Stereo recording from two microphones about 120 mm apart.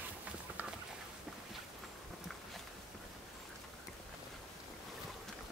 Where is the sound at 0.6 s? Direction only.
15° right (ahead or behind).